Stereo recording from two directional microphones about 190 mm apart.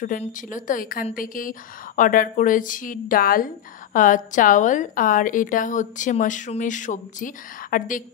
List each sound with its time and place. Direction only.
0.0 s a woman's voice: 45° left (ahead or behind)